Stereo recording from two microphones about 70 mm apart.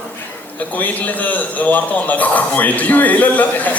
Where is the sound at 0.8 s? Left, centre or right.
Left.